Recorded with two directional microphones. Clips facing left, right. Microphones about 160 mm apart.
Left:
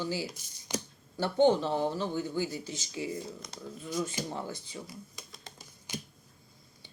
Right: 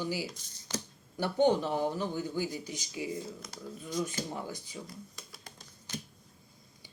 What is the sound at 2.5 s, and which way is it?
Speech, 15° right (ahead or behind).